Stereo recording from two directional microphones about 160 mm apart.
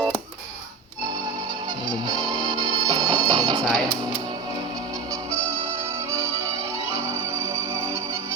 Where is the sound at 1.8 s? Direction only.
25° right (ahead or behind).